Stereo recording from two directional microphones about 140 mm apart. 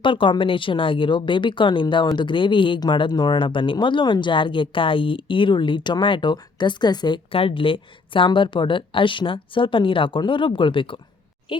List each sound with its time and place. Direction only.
0.0 s a woman's voice: 35° left (ahead or behind)